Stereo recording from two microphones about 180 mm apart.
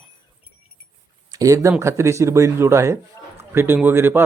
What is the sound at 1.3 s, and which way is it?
Speech, 20° right (ahead or behind).